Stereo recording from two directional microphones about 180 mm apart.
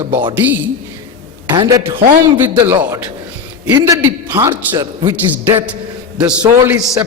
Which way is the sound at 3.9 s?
15° right (ahead or behind).